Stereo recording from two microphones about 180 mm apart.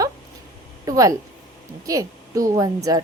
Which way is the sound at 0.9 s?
20° right (ahead or behind).